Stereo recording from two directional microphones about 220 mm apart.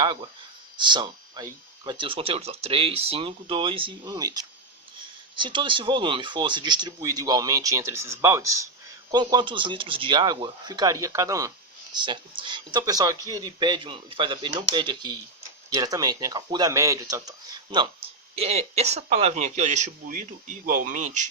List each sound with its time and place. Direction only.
0.0 s speech: 20° right (ahead or behind); by 21.0 s 35° right (ahead or behind)